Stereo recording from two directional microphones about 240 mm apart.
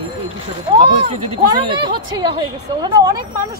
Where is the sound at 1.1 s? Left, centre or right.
Right.